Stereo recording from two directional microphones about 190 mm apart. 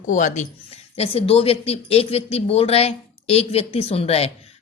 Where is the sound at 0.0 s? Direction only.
45° left (ahead or behind).